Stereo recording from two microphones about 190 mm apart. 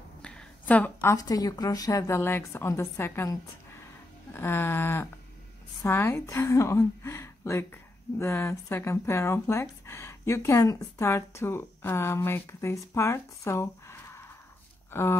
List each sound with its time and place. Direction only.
0.2 s a woman's voice: 5° left (ahead or behind)